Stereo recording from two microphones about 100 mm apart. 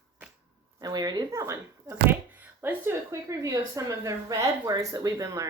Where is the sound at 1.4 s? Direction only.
30° right (ahead or behind).